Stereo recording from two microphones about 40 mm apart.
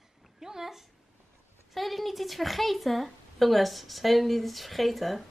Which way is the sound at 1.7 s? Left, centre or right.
Centre.